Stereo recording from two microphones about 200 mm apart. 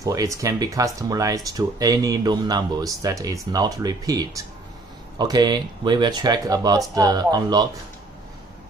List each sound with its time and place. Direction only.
0.0 s speech: 15° right (ahead or behind)